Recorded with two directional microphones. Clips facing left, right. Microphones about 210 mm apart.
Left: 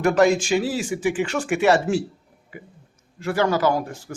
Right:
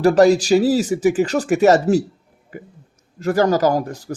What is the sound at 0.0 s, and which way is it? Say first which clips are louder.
Speech: right 5 dB; 35° right (ahead or behind).